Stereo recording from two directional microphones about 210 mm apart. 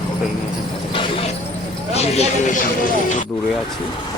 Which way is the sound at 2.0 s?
30° left (ahead or behind).